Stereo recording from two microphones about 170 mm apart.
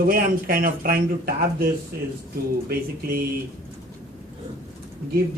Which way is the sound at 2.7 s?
60° right (ahead or behind).